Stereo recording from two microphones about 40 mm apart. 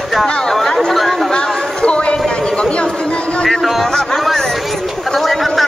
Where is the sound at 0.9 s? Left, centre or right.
Centre.